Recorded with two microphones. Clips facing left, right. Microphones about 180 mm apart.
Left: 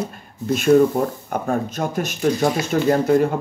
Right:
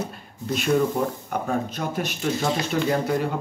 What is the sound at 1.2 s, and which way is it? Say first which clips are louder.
Speech: left 3 dB; 45° left (ahead or behind).